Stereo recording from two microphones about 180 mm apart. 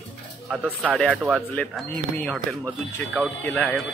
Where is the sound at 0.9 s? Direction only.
Centre (ahead or behind).